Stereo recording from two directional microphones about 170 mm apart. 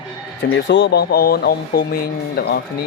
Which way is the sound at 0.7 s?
80° left.